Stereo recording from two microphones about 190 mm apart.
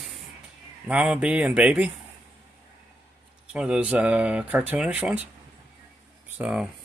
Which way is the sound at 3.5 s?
5° right (ahead or behind).